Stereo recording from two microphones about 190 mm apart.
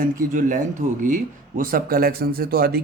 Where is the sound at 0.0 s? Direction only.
45° right (ahead or behind).